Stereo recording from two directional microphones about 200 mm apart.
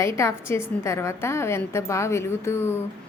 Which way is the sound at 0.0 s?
15° left (ahead or behind).